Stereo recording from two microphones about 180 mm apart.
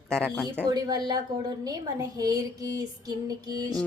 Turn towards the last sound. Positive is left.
turn(degrees=-20)  # may be behind; listen again after turning